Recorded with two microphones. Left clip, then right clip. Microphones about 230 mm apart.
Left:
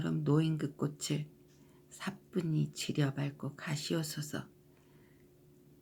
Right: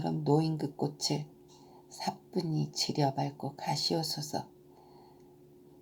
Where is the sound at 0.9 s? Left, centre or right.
Centre.